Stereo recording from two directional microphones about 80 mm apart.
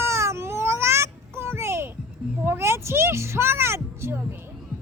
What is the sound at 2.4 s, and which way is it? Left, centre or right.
A child's voice, right.